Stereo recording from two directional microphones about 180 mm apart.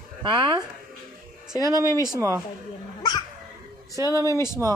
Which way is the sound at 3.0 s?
25° left (ahead or behind).